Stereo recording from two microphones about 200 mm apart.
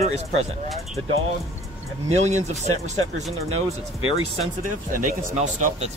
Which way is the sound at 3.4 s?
90° right.